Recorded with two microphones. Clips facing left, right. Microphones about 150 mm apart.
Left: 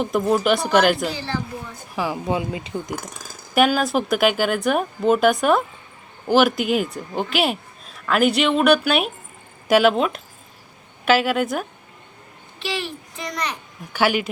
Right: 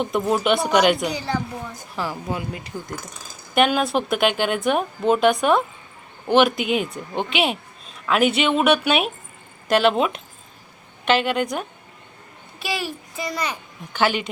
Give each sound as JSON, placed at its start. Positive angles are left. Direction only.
{"t": 0.0, "sound": "a woman's voice", "side_deg": 0}
{"t": 1.0, "sound": "speech", "side_deg": -15}
{"t": 2.0, "sound": "speech", "side_deg": 20}
{"t": 3.5, "sound": "a woman's voice", "side_deg": 0}
{"t": 9.9, "sound": "a woman's voice", "side_deg": -5}
{"t": 12.6, "sound": "a woman's voice", "side_deg": -5}
{"t": 13.9, "sound": "speech", "side_deg": 10}